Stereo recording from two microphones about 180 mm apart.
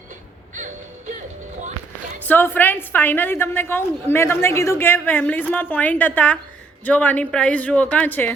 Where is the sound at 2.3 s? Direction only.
10° left (ahead or behind).